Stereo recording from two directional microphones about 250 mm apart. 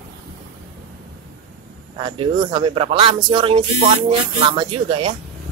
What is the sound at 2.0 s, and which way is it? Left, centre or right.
Speech, centre.